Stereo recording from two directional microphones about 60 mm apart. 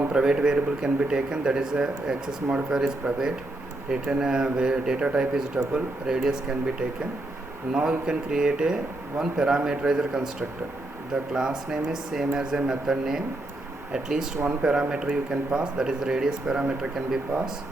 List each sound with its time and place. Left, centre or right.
0.1 s speech: centre